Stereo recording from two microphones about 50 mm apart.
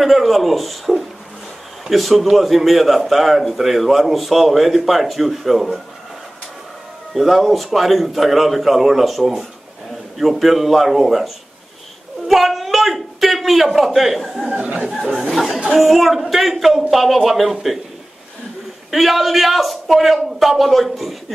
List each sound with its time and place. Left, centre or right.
0.0 s a man's voice: centre
7.2 s a man's voice: centre
14.4 s speech: centre
15.3 s a man's voice: centre
18.9 s a man's voice: centre